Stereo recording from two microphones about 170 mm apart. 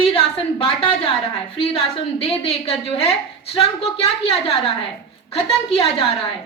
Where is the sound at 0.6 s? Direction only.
30° left (ahead or behind).